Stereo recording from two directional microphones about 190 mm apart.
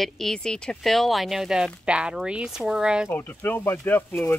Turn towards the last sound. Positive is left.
turn(degrees=10)  # may be behind; listen again after turning